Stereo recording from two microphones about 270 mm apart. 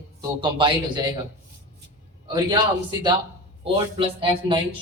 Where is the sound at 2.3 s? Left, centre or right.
Centre.